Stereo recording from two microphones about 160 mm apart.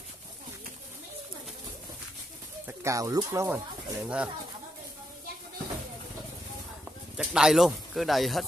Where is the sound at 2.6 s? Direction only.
20° right (ahead or behind).